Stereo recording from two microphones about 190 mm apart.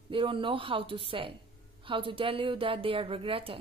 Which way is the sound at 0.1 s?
25° right (ahead or behind).